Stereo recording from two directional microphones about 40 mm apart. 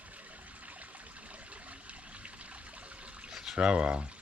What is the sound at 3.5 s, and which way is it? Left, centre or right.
Speech, right.